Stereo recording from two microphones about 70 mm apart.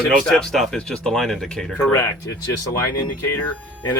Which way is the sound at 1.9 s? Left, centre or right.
Left.